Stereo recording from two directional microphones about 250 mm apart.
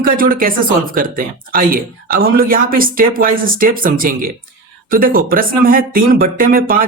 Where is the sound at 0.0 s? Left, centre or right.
Right.